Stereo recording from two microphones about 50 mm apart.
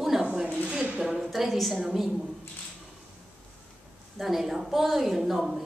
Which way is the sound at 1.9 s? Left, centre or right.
Centre.